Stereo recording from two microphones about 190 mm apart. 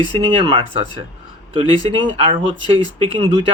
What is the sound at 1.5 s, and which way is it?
Speech, 30° right (ahead or behind).